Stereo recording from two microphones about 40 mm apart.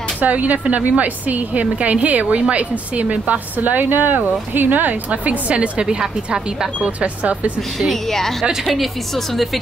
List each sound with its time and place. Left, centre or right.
0.2 s speech: right
5.1 s speech: right; by 6.9 s centre
7.0 s speech: right
7.9 s a woman's voice: centre